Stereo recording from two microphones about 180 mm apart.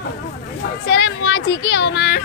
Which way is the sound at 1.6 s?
75° left (ahead or behind).